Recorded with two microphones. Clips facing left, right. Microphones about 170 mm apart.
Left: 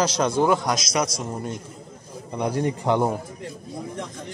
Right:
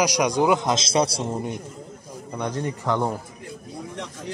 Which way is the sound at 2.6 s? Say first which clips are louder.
Left 3 dB; 20° left (ahead or behind).